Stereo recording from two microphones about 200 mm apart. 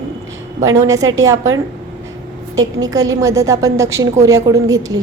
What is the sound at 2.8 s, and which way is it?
A woman's voice, 15° right (ahead or behind).